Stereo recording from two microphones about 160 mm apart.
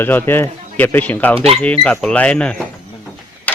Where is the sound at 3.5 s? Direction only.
10° left (ahead or behind).